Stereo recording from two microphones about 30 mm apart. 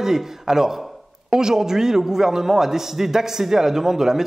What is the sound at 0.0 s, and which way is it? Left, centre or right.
A man's voice, centre.